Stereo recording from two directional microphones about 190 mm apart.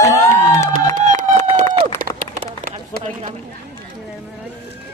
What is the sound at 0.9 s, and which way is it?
Run, 40° right (ahead or behind).